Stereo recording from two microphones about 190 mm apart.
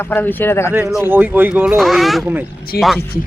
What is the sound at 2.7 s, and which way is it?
Speech, 55° left (ahead or behind).